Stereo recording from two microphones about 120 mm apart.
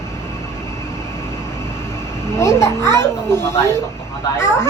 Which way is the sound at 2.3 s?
20° left (ahead or behind).